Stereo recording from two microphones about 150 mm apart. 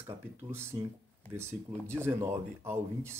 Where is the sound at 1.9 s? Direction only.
15° right (ahead or behind).